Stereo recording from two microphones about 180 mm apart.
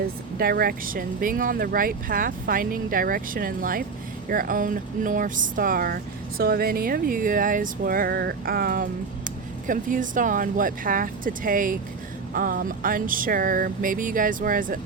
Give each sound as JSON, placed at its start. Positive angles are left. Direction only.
{"t": 0.3, "sound": "speech", "side_deg": -55}